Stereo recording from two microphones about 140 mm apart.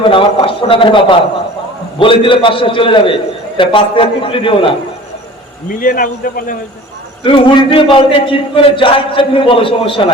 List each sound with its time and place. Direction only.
0.0 s a man's voice: 35° left (ahead or behind)
5.6 s a man's voice: 85° left
7.3 s a man's voice: 40° left (ahead or behind)